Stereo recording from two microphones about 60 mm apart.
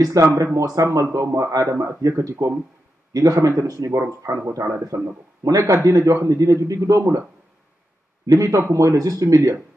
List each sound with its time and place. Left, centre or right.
0.0 s a man's voice: right
0.9 s a man's voice: right
3.1 s a man's voice: right
5.4 s speech: right
5.9 s a man's voice: right
8.3 s speech: right
8.6 s speech: right